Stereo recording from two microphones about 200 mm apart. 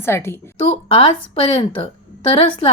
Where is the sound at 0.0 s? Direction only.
10° left (ahead or behind).